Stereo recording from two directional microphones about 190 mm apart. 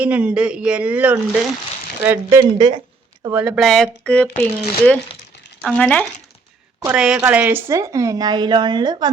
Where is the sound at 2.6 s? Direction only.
20° right (ahead or behind).